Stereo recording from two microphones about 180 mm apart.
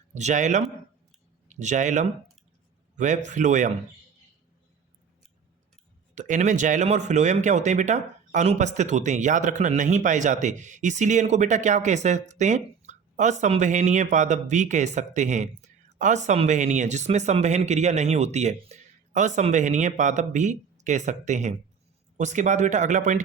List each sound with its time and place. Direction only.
0.1 s speech: 40° right (ahead or behind)
6.1 s speech: 45° right (ahead or behind)